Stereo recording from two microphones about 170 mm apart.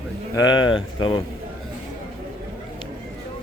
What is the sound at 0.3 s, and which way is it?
Speech, 25° left (ahead or behind).